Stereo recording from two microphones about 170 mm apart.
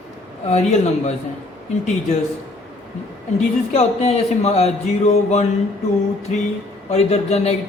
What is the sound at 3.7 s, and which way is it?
Speech, 40° left (ahead or behind).